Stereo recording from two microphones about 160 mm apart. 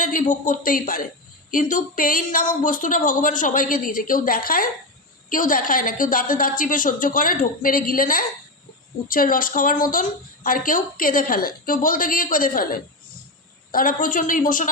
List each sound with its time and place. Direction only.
0.0 s a woman's voice: 55° left (ahead or behind)